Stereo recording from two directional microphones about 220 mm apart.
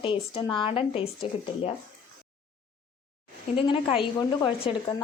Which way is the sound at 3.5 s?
25° left (ahead or behind).